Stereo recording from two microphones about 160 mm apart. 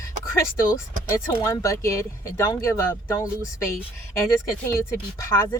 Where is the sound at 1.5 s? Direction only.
20° left (ahead or behind).